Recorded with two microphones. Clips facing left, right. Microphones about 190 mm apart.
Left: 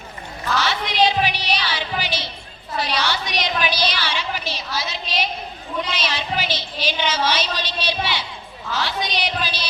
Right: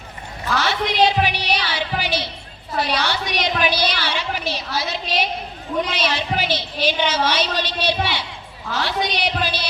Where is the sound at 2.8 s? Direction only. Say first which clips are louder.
Right 2 dB; 55° right (ahead or behind).